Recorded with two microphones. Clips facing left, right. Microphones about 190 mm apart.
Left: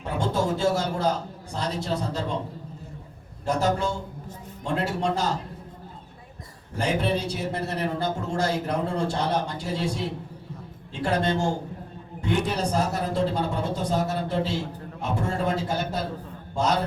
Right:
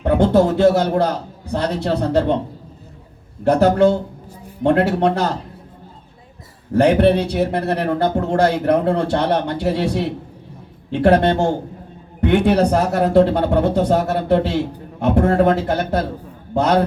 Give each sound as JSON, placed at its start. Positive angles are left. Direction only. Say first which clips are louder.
{"t": 0.0, "sound": "a man's voice", "louder": "right 12 dB", "side_deg": -65}
{"t": 3.4, "sound": "a man's voice", "louder": "right 11 dB", "side_deg": -65}
{"t": 6.7, "sound": "a man's voice", "louder": "right 12 dB", "side_deg": -65}